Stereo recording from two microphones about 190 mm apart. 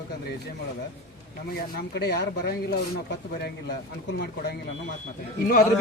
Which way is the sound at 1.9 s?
60° left (ahead or behind).